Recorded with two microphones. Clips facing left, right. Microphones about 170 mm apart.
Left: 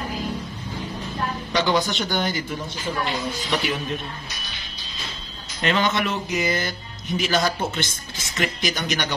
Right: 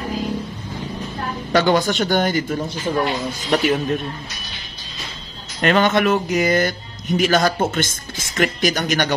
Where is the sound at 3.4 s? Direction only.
45° right (ahead or behind).